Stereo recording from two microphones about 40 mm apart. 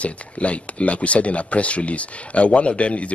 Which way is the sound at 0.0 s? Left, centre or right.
Left.